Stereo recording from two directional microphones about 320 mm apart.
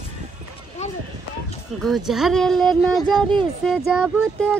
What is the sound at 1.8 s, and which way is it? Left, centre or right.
Speech, centre.